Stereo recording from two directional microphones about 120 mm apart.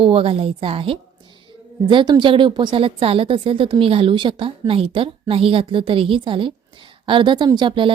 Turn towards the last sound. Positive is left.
turn(degrees=-45)  # may be behind; listen again after turning